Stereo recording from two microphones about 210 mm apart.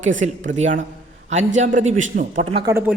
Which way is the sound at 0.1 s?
40° right (ahead or behind).